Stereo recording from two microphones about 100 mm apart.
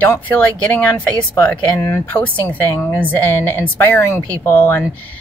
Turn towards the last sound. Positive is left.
turn(degrees=20)  # may be behind; listen again after turning